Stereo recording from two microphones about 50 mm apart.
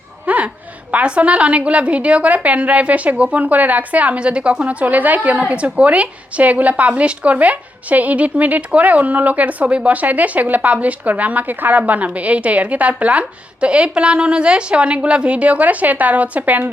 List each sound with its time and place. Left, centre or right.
0.3 s speech: right